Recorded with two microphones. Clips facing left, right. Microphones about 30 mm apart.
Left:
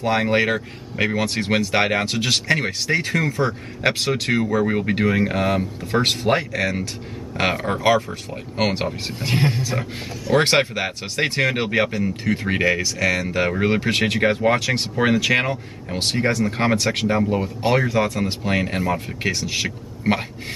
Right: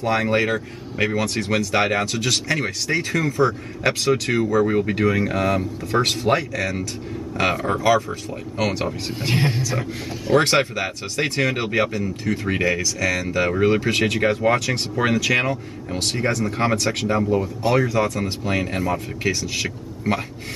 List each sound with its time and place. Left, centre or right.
0.0 s speech: left
1.4 s speech: left
1.8 s speech: centre
9.2 s speech: centre
10.3 s speech: left
14.4 s speech: centre